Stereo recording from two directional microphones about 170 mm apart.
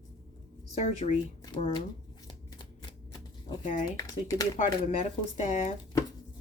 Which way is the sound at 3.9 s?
20° left (ahead or behind).